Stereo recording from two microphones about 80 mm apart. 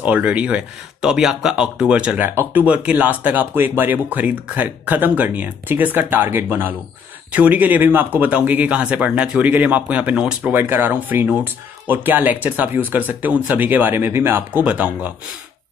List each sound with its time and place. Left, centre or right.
0.0 s speech: centre
2.2 s speech: right
10.5 s speech: right